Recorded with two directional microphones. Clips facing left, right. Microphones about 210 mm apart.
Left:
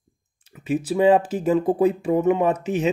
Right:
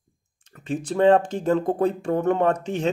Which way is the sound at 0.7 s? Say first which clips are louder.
Left 1 dB; 5° left (ahead or behind).